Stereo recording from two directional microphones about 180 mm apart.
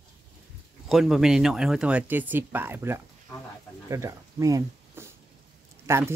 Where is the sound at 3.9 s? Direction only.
20° right (ahead or behind).